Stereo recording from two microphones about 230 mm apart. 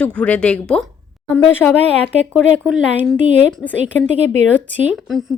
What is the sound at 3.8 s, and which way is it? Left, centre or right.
Speech, right.